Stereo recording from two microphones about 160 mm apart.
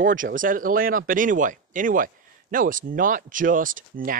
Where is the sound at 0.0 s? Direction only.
55° right (ahead or behind).